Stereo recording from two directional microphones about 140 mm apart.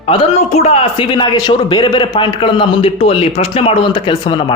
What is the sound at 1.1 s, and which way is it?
A man's voice, 30° left (ahead or behind).